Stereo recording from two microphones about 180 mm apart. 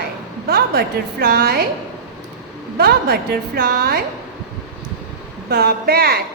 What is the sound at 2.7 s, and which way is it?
A woman's voice, 60° right (ahead or behind).